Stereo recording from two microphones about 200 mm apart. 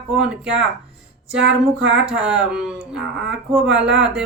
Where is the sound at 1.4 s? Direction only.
60° right (ahead or behind).